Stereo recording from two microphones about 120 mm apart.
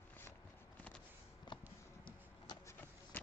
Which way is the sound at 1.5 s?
40° left (ahead or behind).